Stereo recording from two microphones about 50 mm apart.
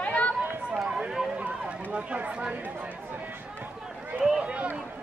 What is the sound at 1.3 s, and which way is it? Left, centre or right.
Run, right.